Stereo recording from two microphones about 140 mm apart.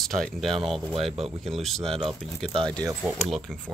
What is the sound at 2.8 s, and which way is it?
Speech, 25° right (ahead or behind).